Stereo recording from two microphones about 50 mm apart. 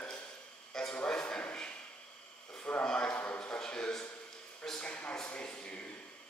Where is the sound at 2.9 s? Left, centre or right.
Centre.